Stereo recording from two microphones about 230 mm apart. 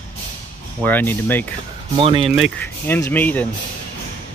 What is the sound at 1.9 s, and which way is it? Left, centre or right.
Speech, right.